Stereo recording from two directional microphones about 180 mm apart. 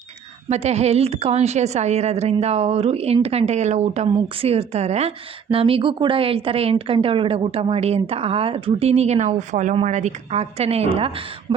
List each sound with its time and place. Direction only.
0.5 s a woman's voice: 35° right (ahead or behind)